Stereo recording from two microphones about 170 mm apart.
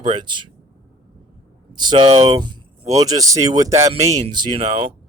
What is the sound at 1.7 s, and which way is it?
Speech, 25° right (ahead or behind).